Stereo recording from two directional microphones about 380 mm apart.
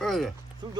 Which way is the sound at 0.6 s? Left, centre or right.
Centre.